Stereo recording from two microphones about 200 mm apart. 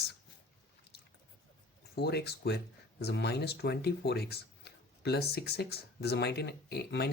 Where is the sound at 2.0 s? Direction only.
55° left (ahead or behind).